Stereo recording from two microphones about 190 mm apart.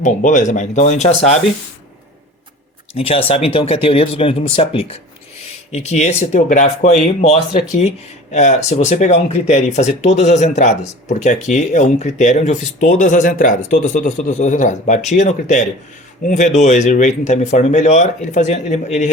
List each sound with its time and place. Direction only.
0.0 s speech: 40° left (ahead or behind)
2.9 s speech: 30° left (ahead or behind)